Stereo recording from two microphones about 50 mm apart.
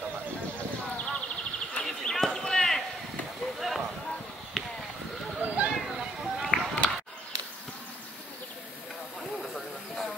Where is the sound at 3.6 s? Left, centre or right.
Centre.